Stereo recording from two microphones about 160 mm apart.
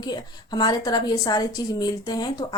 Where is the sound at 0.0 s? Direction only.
25° left (ahead or behind).